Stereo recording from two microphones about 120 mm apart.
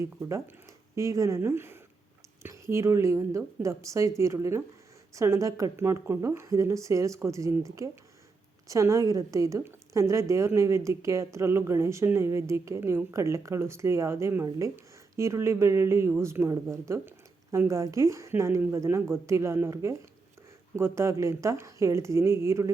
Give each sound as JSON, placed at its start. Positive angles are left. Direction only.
{"t": 0.0, "sound": "a man's voice", "side_deg": -25}